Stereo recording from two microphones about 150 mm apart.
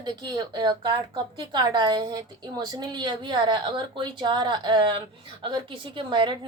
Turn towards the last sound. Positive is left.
turn(degrees=-30)  # may be behind; listen again after turning